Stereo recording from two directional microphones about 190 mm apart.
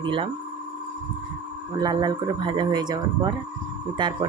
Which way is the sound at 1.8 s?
20° right (ahead or behind).